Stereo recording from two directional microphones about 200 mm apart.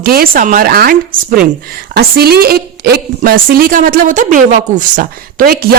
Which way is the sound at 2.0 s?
50° right (ahead or behind).